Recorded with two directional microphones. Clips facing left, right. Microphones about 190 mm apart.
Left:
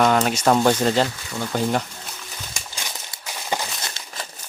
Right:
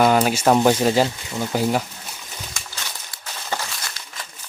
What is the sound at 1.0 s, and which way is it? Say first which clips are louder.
Speech: right 2 dB; 20° right (ahead or behind).